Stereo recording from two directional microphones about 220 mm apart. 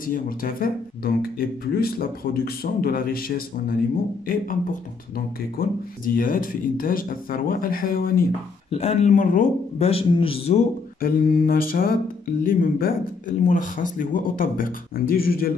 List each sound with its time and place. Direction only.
0.0 s speech: 40° left (ahead or behind)
5.1 s speech: 40° left (ahead or behind)
8.6 s speech: 30° left (ahead or behind)